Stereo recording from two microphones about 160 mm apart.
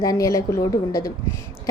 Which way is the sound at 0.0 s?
20° left (ahead or behind).